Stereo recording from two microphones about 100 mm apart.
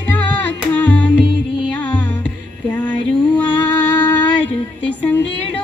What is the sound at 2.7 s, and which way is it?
Female singing, 15° left (ahead or behind).